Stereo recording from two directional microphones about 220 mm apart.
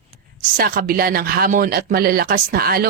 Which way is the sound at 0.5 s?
45° right (ahead or behind).